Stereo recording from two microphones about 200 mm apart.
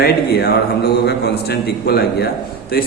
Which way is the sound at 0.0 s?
50° left (ahead or behind).